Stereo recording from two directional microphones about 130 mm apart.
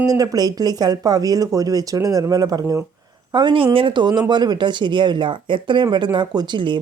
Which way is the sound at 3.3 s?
40° right (ahead or behind).